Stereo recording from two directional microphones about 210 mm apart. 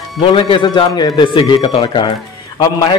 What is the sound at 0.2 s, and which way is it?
A man's voice, 25° left (ahead or behind).